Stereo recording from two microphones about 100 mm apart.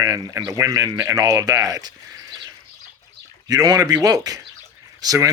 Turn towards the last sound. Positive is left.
turn(degrees=-35)  # may be behind; listen again after turning